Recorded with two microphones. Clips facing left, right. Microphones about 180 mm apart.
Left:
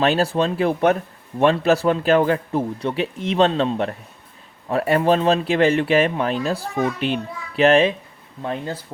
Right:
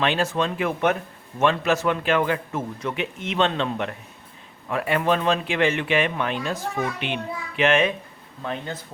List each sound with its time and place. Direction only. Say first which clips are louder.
0.0 s speech: left 4 dB; 35° left (ahead or behind)